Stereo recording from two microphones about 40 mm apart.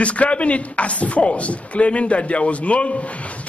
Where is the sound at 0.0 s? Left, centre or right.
Left.